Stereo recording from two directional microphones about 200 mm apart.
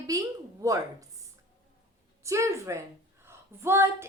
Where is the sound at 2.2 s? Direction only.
15° right (ahead or behind).